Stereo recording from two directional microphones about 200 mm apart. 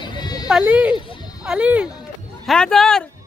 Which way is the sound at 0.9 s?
25° left (ahead or behind).